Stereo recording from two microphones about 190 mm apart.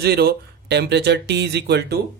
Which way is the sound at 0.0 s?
55° right (ahead or behind).